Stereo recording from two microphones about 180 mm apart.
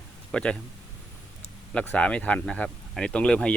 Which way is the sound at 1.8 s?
5° left (ahead or behind).